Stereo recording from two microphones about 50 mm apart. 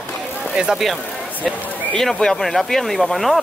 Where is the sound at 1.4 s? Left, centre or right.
Left.